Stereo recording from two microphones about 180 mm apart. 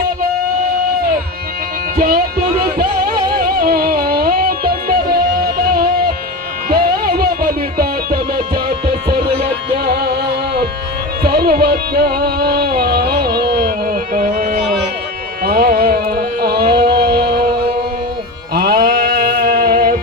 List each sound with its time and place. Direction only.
2.0 s speech: 55° right (ahead or behind)
3.6 s music: 60° right (ahead or behind)
15.4 s carnatic music: 60° right (ahead or behind)
18.5 s music: 60° right (ahead or behind)